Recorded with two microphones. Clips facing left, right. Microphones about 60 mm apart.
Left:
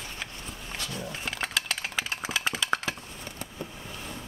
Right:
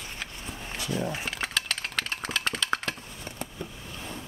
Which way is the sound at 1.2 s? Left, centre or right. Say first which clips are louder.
Even; centre.